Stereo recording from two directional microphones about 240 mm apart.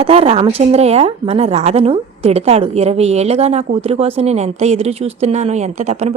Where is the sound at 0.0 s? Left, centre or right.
Right.